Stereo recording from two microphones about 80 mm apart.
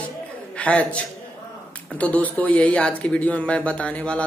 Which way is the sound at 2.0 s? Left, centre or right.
Centre.